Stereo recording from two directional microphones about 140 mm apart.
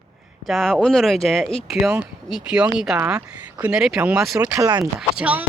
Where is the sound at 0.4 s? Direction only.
Centre (ahead or behind).